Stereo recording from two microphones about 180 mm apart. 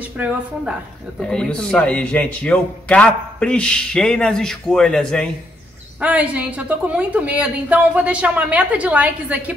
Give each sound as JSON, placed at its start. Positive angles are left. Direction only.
{"t": 1.2, "sound": "a man's voice", "side_deg": 5}
{"t": 5.9, "sound": "a woman's voice", "side_deg": -10}